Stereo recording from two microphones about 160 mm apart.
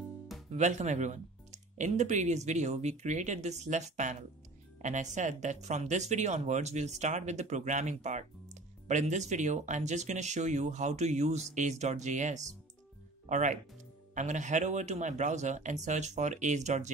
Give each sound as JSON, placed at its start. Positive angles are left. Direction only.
{"t": 0.5, "sound": "speech", "side_deg": -45}